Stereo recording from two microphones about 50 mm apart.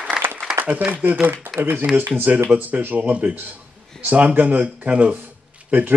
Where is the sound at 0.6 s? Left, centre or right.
Right.